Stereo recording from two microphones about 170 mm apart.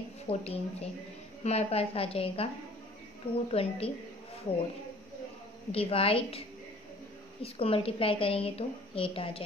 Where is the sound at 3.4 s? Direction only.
35° left (ahead or behind).